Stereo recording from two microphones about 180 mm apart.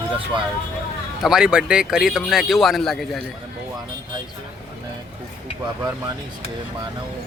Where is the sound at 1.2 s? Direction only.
5° right (ahead or behind).